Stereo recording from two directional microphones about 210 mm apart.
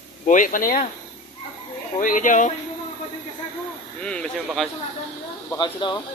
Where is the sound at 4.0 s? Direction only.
5° left (ahead or behind).